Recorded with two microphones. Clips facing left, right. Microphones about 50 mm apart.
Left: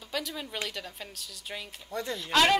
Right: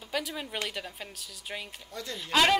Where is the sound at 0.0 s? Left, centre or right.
Centre.